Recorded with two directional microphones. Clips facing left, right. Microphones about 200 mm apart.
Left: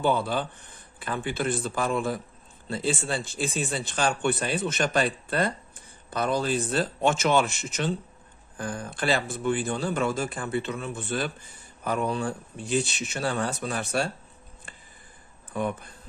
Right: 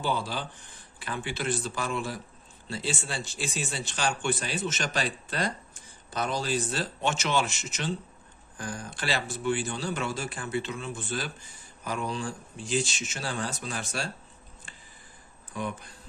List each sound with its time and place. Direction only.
0.0 s a man's voice: 55° left (ahead or behind)